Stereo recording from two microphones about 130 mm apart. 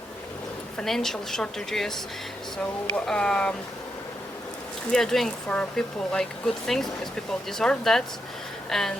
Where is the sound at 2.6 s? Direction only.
5° left (ahead or behind).